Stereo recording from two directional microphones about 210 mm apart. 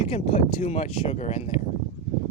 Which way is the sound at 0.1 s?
30° left (ahead or behind).